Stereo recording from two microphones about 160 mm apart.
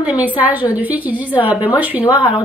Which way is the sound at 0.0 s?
10° right (ahead or behind).